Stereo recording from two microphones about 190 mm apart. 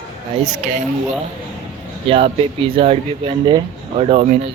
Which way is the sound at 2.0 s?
30° right (ahead or behind).